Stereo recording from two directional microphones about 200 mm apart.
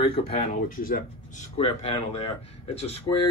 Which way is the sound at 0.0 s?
30° left (ahead or behind).